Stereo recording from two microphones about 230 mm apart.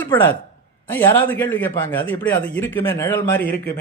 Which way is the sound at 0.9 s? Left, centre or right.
Centre.